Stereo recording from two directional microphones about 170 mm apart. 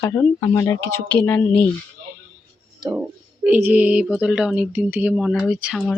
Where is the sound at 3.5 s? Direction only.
10° right (ahead or behind).